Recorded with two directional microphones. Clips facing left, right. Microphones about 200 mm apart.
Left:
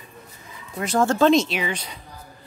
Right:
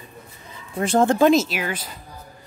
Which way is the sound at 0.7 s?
30° right (ahead or behind).